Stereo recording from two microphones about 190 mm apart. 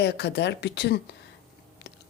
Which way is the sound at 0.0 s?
60° left (ahead or behind).